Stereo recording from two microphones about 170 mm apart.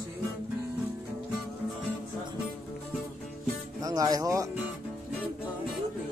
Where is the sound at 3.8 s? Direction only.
20° right (ahead or behind).